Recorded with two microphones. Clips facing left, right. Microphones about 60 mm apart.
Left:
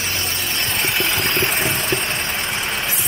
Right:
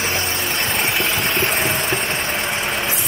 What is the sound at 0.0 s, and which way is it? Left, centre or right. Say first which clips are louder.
Vehicle: right 3 dB; right.